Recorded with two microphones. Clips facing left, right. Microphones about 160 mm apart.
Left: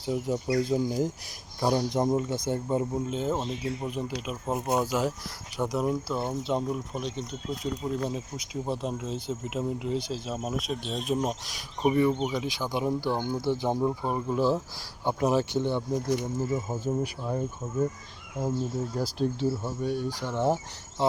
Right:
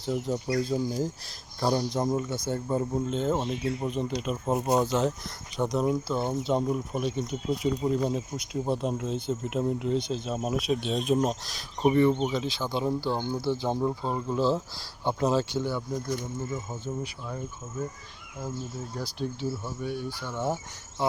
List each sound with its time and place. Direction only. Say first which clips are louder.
0.0 s speech: even; 10° left (ahead or behind)
2.9 s speech: right 2 dB; 5° left (ahead or behind); by 16.0 s 20° left (ahead or behind)
16.4 s speech: left 5 dB; 35° left (ahead or behind)
19.8 s speech: left 4 dB; 40° left (ahead or behind)